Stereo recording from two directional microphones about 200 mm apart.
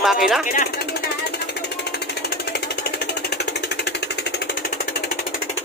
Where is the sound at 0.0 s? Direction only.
Centre (ahead or behind).